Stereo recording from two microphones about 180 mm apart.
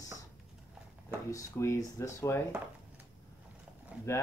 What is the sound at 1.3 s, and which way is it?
Speech, 15° left (ahead or behind).